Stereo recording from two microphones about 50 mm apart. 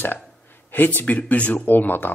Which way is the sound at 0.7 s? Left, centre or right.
Left.